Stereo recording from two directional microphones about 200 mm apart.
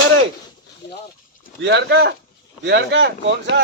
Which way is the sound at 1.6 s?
60° right (ahead or behind).